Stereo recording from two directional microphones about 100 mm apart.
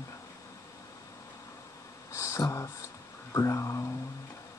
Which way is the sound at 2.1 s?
30° left (ahead or behind).